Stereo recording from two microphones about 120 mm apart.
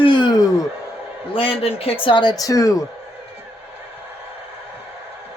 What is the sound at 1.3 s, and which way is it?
Speech, 50° left (ahead or behind).